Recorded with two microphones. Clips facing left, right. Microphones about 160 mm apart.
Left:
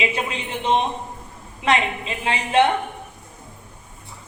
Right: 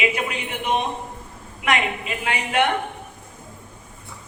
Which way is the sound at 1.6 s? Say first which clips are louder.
Left 2 dB; 30° left (ahead or behind).